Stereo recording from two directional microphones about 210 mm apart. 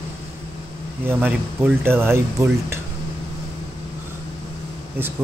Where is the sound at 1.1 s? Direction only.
10° right (ahead or behind).